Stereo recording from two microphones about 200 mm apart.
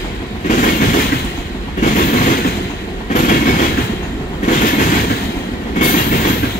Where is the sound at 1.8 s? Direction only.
40° left (ahead or behind).